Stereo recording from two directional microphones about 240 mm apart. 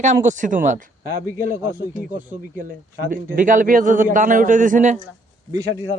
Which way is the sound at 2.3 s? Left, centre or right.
Right.